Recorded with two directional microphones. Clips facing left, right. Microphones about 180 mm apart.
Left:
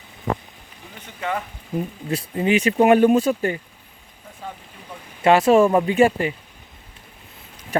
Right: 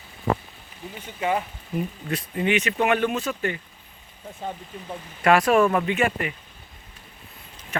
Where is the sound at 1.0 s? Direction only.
15° right (ahead or behind).